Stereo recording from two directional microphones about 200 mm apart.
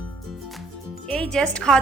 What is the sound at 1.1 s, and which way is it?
Speech, 5° left (ahead or behind).